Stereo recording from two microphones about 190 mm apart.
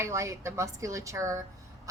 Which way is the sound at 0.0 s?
15° right (ahead or behind).